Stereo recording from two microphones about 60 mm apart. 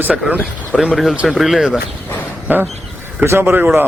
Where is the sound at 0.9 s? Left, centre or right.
Centre.